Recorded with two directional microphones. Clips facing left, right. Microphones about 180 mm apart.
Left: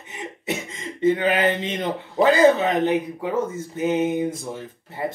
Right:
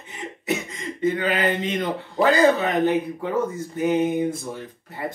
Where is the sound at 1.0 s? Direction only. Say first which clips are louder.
Left 3 dB; 20° left (ahead or behind).